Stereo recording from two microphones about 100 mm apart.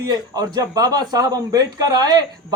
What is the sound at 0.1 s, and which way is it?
A man's voice, 40° right (ahead or behind).